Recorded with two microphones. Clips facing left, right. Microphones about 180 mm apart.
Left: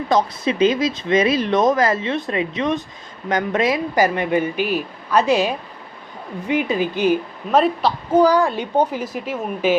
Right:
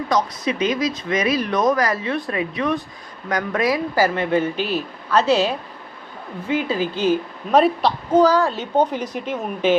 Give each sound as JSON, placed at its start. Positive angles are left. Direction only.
{"t": 0.1, "sound": "speech", "side_deg": 30}
{"t": 7.5, "sound": "a woman's voice", "side_deg": 0}
{"t": 8.1, "sound": "speech", "side_deg": 10}